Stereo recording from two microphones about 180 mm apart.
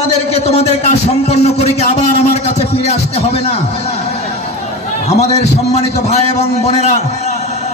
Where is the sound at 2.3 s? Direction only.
35° left (ahead or behind).